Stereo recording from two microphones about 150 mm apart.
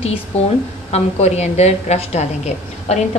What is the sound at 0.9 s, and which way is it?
A woman's voice, 45° left (ahead or behind).